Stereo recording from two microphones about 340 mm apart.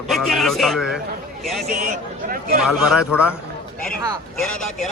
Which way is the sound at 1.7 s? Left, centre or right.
Right.